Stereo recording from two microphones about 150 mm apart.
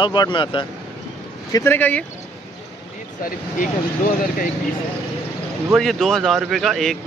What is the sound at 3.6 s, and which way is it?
Speech, 65° left (ahead or behind).